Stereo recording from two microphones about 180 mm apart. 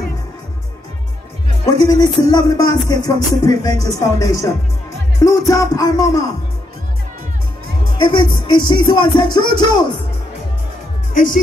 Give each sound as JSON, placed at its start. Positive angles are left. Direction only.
{"t": 1.7, "sound": "music", "side_deg": 20}
{"t": 8.0, "sound": "music", "side_deg": 25}